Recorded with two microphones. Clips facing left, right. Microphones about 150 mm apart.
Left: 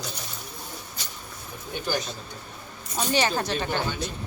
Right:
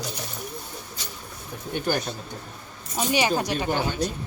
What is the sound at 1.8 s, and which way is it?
Speech, 55° right (ahead or behind).